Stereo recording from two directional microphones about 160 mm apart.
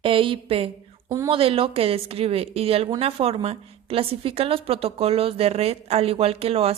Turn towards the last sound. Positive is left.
turn(degrees=-40)  # may be behind; listen again after turning